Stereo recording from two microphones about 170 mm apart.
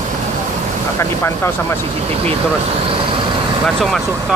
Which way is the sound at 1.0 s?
15° left (ahead or behind).